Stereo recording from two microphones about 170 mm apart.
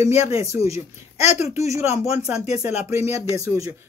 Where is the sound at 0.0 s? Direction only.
15° right (ahead or behind).